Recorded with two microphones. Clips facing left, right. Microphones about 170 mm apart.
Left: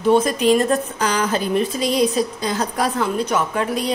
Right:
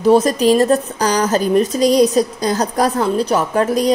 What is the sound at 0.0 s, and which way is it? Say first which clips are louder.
A woman's voice: right 4 dB; 35° right (ahead or behind).